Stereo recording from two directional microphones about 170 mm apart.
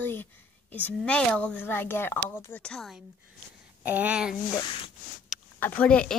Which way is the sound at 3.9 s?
10° right (ahead or behind).